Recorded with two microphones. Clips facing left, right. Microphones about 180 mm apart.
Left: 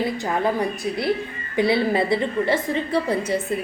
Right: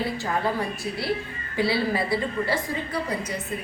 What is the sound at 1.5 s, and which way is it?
A woman's voice, 20° left (ahead or behind).